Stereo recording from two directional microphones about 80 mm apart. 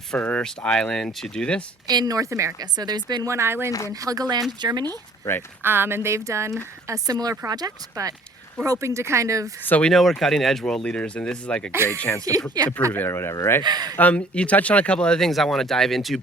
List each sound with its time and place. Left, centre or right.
0.1 s speech: centre
1.9 s speech: right
2.6 s speech: right
3.2 s speech: right
3.7 s speech: left
3.9 s speech: right
5.6 s speech: right
9.6 s speech: centre
9.9 s speech: centre
11.7 s speech: right
12.6 s speech: right
13.1 s speech: left
13.6 s speech: right
13.9 s speech: centre